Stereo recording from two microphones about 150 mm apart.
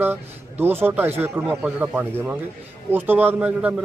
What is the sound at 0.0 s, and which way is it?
A man's voice, 15° right (ahead or behind).